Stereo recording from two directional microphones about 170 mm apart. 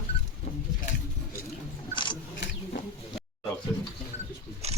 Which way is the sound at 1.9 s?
30° left (ahead or behind).